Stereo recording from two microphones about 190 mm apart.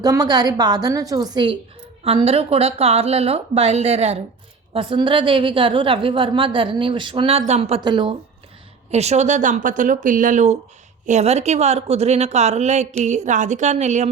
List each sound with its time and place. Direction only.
0.0 s a woman's voice: 20° right (ahead or behind)
7.8 s a woman's voice: 25° right (ahead or behind)
8.9 s speech: 35° right (ahead or behind)